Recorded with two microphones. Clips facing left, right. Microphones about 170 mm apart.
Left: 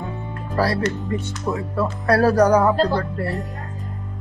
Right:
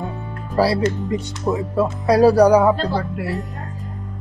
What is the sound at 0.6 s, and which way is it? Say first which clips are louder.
Speech: right 3 dB; 10° right (ahead or behind).